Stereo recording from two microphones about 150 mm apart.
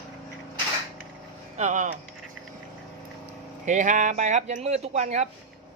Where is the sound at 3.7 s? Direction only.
55° right (ahead or behind).